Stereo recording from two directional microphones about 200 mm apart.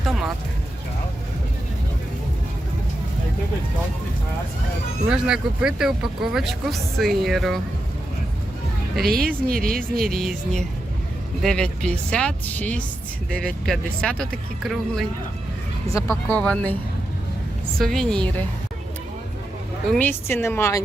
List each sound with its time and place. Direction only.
5.0 s speech: 5° right (ahead or behind)
9.0 s speech: 50° right (ahead or behind)
9.9 s speech: centre (ahead or behind)
15.9 s a woman's voice: 15° left (ahead or behind)
17.7 s speech: centre (ahead or behind)
19.9 s a woman's voice: 10° left (ahead or behind)